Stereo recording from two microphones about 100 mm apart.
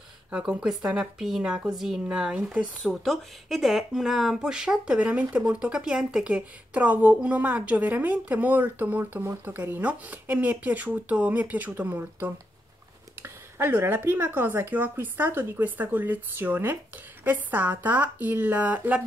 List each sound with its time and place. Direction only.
0.3 s a woman's voice: 10° right (ahead or behind)